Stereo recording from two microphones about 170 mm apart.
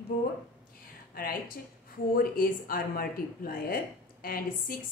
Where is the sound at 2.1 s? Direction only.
60° left (ahead or behind).